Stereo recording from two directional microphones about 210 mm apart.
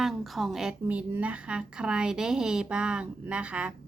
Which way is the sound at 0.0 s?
Centre (ahead or behind).